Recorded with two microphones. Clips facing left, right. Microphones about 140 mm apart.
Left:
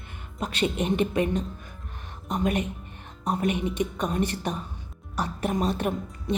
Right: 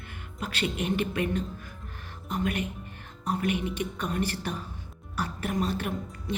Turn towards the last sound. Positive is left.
turn(degrees=20)  # may be behind; listen again after turning